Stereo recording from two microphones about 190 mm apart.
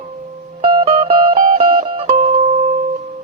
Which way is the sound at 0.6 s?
30° right (ahead or behind).